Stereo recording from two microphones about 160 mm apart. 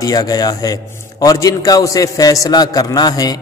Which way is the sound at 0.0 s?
25° left (ahead or behind).